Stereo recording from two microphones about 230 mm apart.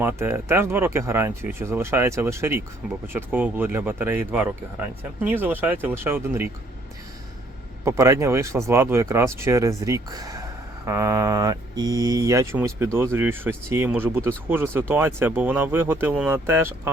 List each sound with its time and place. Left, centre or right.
0.0 s speech: centre
7.9 s speech: centre